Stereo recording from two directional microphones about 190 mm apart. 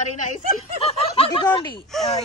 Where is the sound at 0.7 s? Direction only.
30° left (ahead or behind).